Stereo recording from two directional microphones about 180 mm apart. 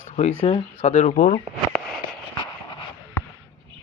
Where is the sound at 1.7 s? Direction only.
Centre (ahead or behind).